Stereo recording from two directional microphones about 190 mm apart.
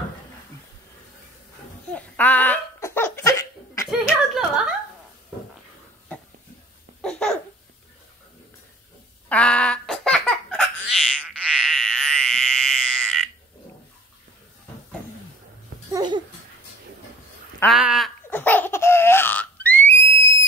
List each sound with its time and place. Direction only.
1.9 s laughter: 5° left (ahead or behind)
4.0 s a sound: 5° right (ahead or behind)
7.0 s babbling: 5° left (ahead or behind)
9.3 s baby laughter: 5° left (ahead or behind)
11.6 s frog: centre (ahead or behind)
15.9 s babbling: 20° right (ahead or behind)
17.6 s a sound: centre (ahead or behind)
18.3 s baby laughter: 10° left (ahead or behind)